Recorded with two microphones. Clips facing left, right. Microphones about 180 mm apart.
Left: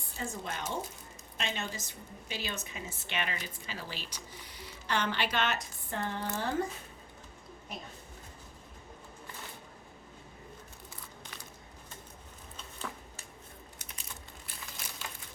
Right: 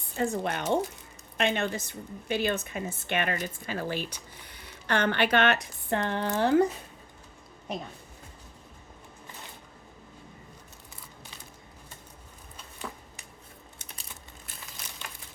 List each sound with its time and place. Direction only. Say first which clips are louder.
0.2 s a woman's voice: right 9 dB; 65° right (ahead or behind)